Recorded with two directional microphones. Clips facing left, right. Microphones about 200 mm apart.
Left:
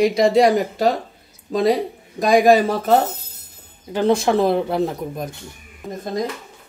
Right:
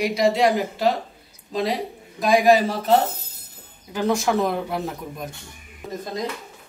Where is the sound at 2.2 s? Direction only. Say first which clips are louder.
Left 3 dB; 50° left (ahead or behind).